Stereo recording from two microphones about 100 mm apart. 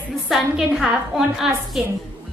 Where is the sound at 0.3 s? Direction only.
5° right (ahead or behind).